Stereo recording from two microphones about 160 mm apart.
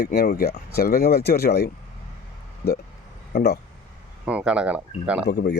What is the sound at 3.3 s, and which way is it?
Speech, 75° left (ahead or behind).